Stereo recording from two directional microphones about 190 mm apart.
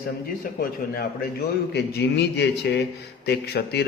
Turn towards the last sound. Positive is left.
turn(degrees=60)  # may be behind; listen again after turning